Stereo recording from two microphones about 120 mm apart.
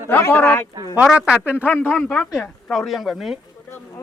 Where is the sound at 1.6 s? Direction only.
15° left (ahead or behind).